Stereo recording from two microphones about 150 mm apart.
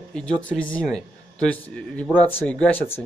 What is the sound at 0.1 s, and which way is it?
Speech, 5° left (ahead or behind).